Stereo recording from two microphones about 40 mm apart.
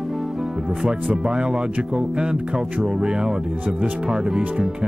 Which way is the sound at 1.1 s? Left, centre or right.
Right.